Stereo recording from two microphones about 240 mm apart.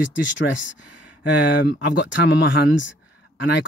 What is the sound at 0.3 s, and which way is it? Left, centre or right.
Speech, left.